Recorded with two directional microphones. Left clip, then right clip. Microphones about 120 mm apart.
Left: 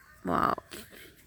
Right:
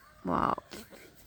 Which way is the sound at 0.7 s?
45° right (ahead or behind).